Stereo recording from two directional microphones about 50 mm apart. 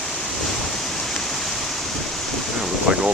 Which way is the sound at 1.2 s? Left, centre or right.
Centre.